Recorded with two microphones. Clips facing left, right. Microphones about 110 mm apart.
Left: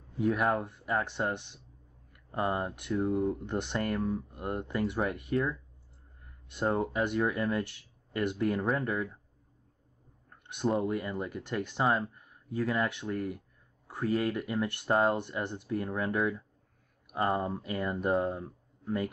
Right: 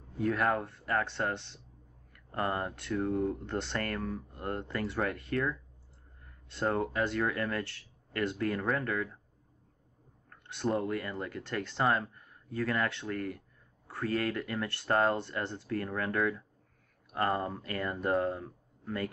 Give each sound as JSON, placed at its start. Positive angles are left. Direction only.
{"t": 0.2, "sound": "speech", "side_deg": 15}
{"t": 10.3, "sound": "a sound", "side_deg": 20}
{"t": 10.8, "sound": "speech", "side_deg": 20}